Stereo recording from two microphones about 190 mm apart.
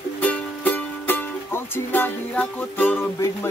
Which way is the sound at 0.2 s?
10° left (ahead or behind).